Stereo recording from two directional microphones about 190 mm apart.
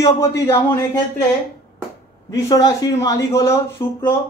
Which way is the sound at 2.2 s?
20° left (ahead or behind).